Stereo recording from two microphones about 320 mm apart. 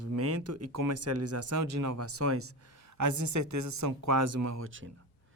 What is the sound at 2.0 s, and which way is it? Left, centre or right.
Speech, right.